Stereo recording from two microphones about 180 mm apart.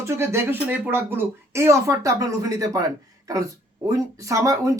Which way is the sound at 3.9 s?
15° right (ahead or behind).